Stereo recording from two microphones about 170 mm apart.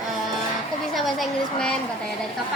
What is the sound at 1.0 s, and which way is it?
Speech, centre (ahead or behind).